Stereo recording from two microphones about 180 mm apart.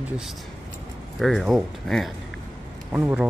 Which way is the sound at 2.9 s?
10° right (ahead or behind).